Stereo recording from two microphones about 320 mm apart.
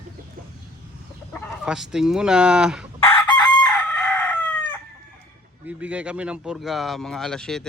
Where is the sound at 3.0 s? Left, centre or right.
Centre.